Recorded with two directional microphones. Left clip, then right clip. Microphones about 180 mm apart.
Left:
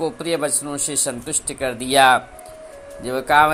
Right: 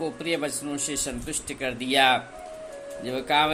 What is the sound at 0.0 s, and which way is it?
Speech, 30° left (ahead or behind).